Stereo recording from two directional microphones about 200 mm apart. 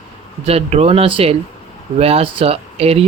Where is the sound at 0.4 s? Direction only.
30° right (ahead or behind).